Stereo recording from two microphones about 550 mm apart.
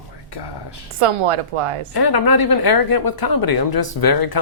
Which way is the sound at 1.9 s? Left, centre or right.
Left.